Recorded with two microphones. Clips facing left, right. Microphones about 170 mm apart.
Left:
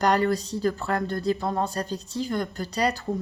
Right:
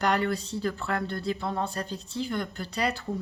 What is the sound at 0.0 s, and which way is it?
Speech, 40° left (ahead or behind).